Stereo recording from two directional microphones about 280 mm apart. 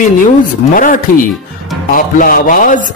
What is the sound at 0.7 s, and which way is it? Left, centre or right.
Speech, left.